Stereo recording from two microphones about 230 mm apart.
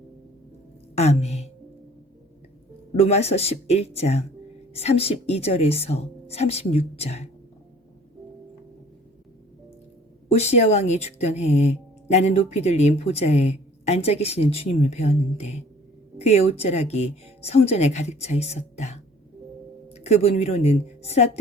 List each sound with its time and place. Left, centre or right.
0.9 s speech: left
2.9 s speech: left
10.3 s a woman's voice: left